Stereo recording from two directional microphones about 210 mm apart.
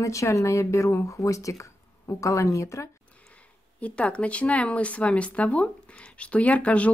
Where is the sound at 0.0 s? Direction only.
15° left (ahead or behind).